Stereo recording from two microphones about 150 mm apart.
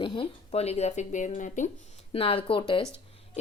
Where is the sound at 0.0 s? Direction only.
35° left (ahead or behind); by 1.7 s 55° left (ahead or behind).